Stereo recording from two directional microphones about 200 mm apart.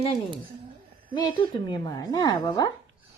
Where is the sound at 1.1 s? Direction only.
25° left (ahead or behind).